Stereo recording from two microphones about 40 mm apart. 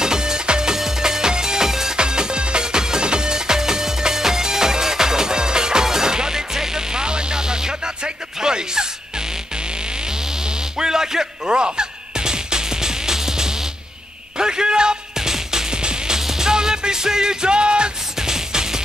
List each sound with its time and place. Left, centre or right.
0.0 s music: centre
10.8 s music: centre